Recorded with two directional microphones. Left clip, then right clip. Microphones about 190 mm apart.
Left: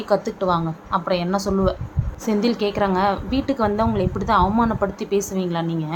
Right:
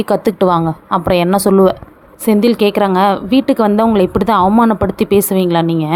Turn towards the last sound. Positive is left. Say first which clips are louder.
# right 11 dB
turn(degrees=-45)  # may be behind; listen again after turning